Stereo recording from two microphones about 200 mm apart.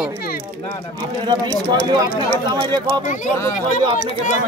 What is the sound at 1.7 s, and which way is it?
Speech, 20° right (ahead or behind).